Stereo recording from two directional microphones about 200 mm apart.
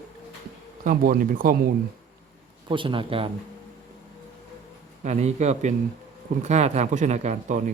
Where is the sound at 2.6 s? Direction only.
25° right (ahead or behind).